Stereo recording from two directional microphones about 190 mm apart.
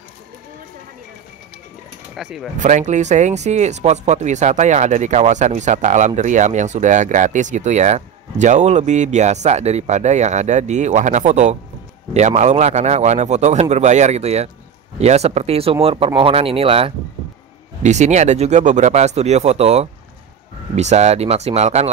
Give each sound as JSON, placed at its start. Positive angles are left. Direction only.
{"t": 2.1, "sound": "speech", "side_deg": -5}
{"t": 2.6, "sound": "speech", "side_deg": -40}